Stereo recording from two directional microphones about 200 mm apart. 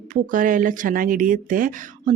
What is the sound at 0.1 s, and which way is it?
Speech, 40° right (ahead or behind).